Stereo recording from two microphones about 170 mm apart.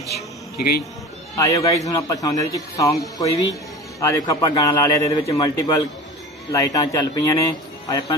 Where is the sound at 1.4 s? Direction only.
20° left (ahead or behind).